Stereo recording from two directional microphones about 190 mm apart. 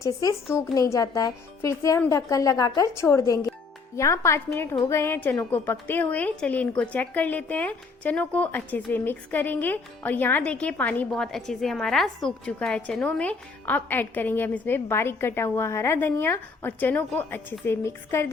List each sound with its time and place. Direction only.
0.0 s a woman's voice: 15° left (ahead or behind)